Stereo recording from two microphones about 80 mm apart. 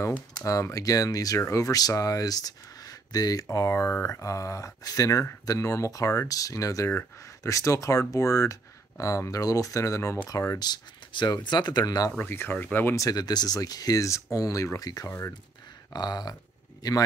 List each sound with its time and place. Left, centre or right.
0.5 s speech: left
3.7 s speech: left
10.6 s speech: left
12.3 s speech: left
12.9 s speech: left
15.0 s speech: left
15.9 s speech: left